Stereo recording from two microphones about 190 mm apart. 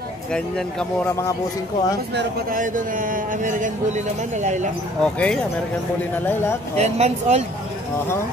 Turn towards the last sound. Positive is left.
turn(degrees=-35)  # may be behind; listen again after turning